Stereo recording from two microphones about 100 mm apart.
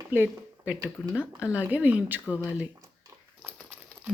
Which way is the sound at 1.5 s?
15° right (ahead or behind).